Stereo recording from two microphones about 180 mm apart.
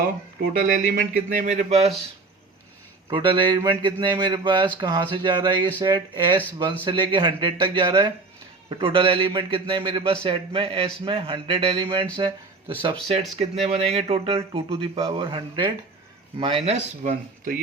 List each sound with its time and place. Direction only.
0.3 s speech: 50° right (ahead or behind)
3.1 s speech: 25° right (ahead or behind); by 17.6 s 45° right (ahead or behind)